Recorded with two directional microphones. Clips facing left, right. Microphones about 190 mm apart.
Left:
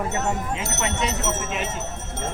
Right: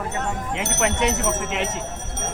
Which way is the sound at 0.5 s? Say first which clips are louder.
Right 4 dB; 75° right (ahead or behind).